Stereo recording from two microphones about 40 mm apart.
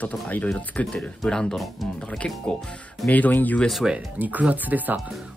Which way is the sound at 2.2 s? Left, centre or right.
Left.